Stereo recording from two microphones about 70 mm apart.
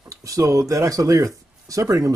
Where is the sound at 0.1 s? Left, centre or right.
Right.